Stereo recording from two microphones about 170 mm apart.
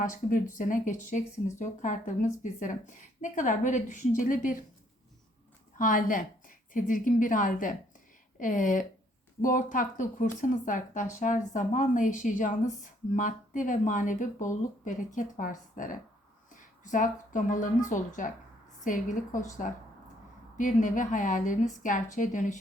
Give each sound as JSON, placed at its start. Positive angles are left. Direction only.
{"t": 0.0, "sound": "a woman's voice", "side_deg": 50}
{"t": 5.8, "sound": "a woman's voice", "side_deg": 55}